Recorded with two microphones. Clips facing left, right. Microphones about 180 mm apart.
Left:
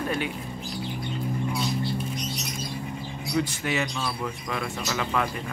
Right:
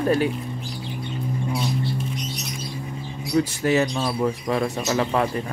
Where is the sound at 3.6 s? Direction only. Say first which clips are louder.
Right 8 dB; 40° right (ahead or behind).